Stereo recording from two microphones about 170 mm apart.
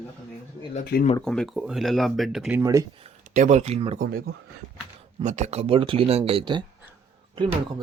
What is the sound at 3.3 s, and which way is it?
Speech, 45° right (ahead or behind).